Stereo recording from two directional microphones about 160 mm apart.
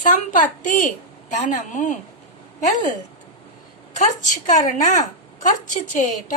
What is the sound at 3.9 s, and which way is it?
A woman's voice, 50° left (ahead or behind).